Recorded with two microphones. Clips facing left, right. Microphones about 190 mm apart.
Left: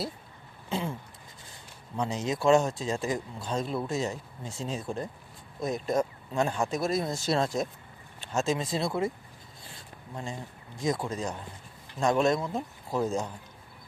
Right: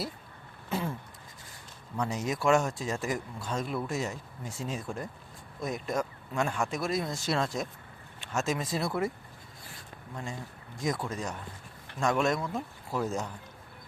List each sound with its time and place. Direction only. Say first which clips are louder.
0.7 s speech: left 1 dB; 20° left (ahead or behind)
2.0 s speech: left 2 dB; 25° left (ahead or behind)
9.6 s a sound: even; 30° left (ahead or behind)
10.8 s speech: left 3 dB; 15° left (ahead or behind)
11.1 s speech: left 2 dB; 30° left (ahead or behind)
12.4 s speech: left 2 dB; 20° left (ahead or behind)